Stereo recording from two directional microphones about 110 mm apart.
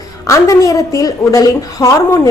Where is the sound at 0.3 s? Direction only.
30° left (ahead or behind).